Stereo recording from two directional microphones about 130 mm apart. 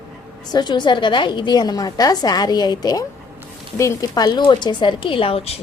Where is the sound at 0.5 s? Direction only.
35° left (ahead or behind).